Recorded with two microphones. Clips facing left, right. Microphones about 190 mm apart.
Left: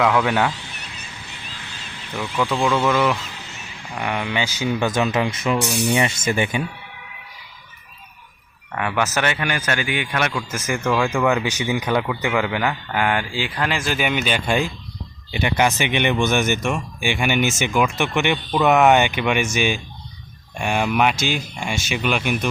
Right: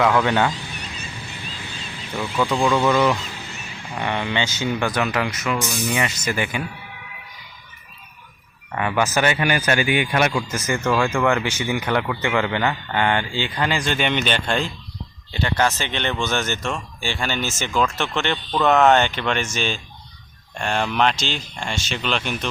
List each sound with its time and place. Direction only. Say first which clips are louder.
0.0 s speech: even; 5° left (ahead or behind)
2.1 s speech: right 1 dB; centre (ahead or behind)
4.9 s speech: left 2 dB; 25° left (ahead or behind)
8.7 s speech: right 1 dB; 5° right (ahead or behind)
10.5 s a man's voice: even; 10° left (ahead or behind)